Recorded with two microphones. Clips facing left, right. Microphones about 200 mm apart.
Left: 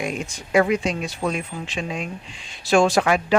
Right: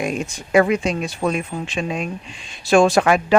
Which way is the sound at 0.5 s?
55° right (ahead or behind).